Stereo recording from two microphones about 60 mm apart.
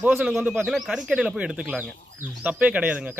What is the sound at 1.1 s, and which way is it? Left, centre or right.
A man's voice, centre.